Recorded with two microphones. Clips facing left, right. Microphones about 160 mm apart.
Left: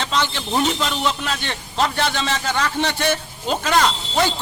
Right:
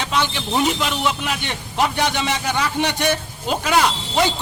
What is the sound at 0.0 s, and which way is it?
A man's voice, 10° right (ahead or behind).